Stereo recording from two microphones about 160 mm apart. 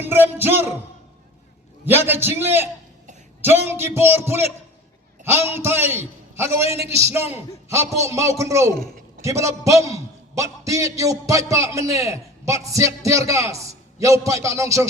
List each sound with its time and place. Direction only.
0.0 s a man's voice: 15° right (ahead or behind)
1.9 s a man's voice: 15° right (ahead or behind)